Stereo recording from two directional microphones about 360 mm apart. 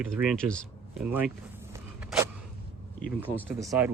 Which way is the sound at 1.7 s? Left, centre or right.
Centre.